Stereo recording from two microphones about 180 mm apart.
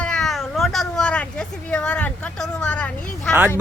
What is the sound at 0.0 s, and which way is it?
Cat, 5° left (ahead or behind).